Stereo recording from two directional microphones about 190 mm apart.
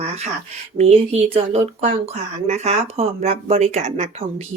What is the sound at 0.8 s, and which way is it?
Speech, 35° right (ahead or behind).